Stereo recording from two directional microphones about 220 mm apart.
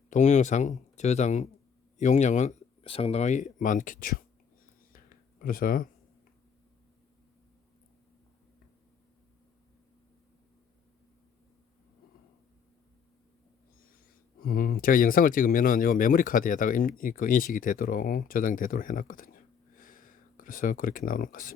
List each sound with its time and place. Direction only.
0.1 s speech: 35° left (ahead or behind)
4.9 s a sound: 40° left (ahead or behind)
14.4 s speech: 40° left (ahead or behind)